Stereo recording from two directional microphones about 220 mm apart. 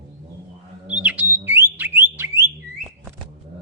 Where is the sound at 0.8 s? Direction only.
5° right (ahead or behind).